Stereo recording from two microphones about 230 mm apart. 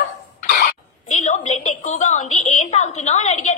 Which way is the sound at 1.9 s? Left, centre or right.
Left.